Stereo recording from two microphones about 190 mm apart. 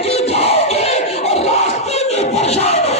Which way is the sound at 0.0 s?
35° left (ahead or behind).